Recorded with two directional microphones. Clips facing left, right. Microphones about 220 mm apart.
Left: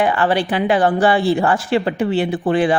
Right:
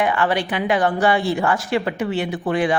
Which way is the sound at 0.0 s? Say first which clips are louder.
Left 3 dB; 35° left (ahead or behind).